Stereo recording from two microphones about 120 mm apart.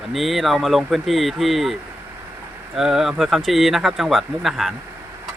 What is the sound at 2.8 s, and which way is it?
Speech, 5° right (ahead or behind).